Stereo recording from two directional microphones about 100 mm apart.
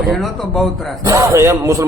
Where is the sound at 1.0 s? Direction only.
30° right (ahead or behind).